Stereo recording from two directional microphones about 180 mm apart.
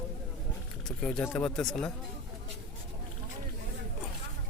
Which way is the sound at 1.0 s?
5° left (ahead or behind).